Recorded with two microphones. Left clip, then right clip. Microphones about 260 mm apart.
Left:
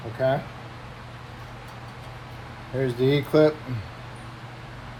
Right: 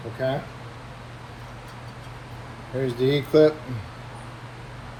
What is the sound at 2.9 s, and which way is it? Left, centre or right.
Speech, left.